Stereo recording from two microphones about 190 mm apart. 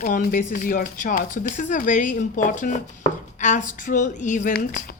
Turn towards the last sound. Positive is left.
turn(degrees=45)  # may be behind; listen again after turning